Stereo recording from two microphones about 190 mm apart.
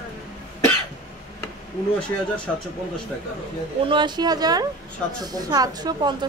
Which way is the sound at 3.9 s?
25° right (ahead or behind).